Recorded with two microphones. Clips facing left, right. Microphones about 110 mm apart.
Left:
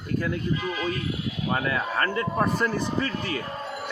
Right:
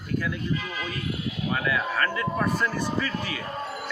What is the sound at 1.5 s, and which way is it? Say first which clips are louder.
A man's voice: left 1 dB; 35° left (ahead or behind).